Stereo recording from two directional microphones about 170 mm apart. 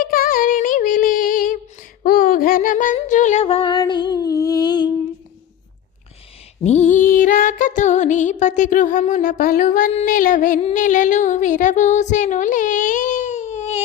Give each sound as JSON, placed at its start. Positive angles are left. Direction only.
{"t": 0.0, "sound": "female singing", "side_deg": 55}
{"t": 2.0, "sound": "music", "side_deg": 55}
{"t": 6.7, "sound": "female singing", "side_deg": 40}
{"t": 7.1, "sound": "music", "side_deg": 50}
{"t": 10.8, "sound": "a sound", "side_deg": 45}